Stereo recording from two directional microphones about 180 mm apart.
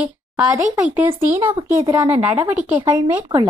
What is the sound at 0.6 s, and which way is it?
Speech, 45° right (ahead or behind).